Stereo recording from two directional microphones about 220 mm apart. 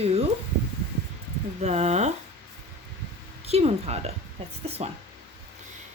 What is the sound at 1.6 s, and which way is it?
Speech, 30° right (ahead or behind).